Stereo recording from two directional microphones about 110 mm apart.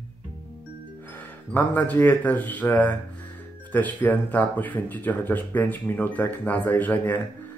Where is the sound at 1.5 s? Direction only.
15° left (ahead or behind).